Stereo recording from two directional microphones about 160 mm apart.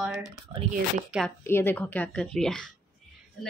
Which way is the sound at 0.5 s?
25° right (ahead or behind).